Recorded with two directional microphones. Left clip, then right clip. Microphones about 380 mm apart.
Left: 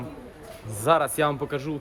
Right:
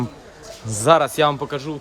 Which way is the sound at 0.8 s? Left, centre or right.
Right.